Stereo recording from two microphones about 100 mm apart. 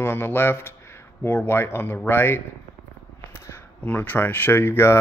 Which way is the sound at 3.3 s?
25° left (ahead or behind).